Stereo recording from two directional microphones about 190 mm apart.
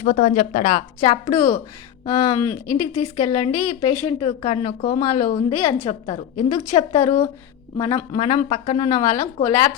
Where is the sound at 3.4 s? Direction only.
30° left (ahead or behind).